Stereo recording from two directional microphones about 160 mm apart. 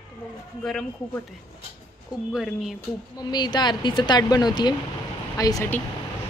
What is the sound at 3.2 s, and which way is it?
A woman's voice, 25° left (ahead or behind).